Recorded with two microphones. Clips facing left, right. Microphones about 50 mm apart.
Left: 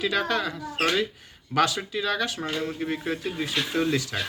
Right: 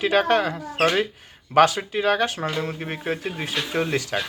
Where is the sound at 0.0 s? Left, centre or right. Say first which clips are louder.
Right 6 dB; right.